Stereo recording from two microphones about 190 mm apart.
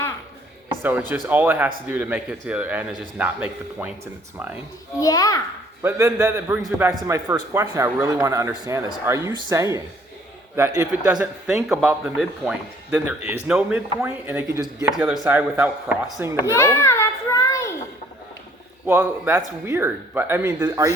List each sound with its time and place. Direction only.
0.8 s a man's voice: 10° right (ahead or behind)
4.9 s a child's voice: 20° left (ahead or behind)
5.8 s a man's voice: 15° right (ahead or behind)
16.5 s a sound: 15° left (ahead or behind)
18.9 s a man's voice: 10° right (ahead or behind)